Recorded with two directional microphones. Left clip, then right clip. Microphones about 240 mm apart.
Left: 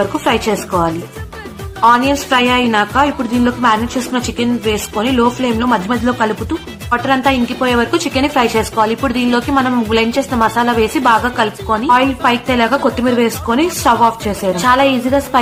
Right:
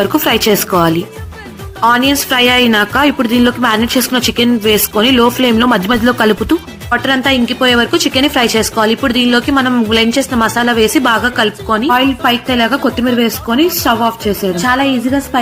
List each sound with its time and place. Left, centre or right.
0.3 s a woman's voice: right; by 15.4 s centre